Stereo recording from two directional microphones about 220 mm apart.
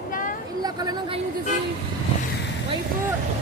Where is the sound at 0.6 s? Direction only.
15° right (ahead or behind).